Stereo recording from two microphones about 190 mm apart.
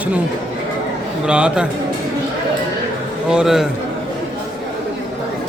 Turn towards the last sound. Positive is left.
turn(degrees=-5)  # may be behind; listen again after turning